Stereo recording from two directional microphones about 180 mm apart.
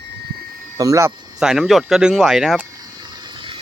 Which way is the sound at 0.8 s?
15° right (ahead or behind).